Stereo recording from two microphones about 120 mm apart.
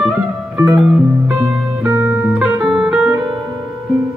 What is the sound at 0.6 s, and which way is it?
Music, 5° right (ahead or behind).